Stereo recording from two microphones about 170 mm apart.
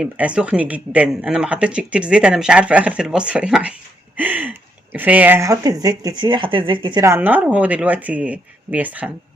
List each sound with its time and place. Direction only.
0.0 s speech: 5° right (ahead or behind); by 7.0 s 30° right (ahead or behind)
7.0 s speech: 15° right (ahead or behind)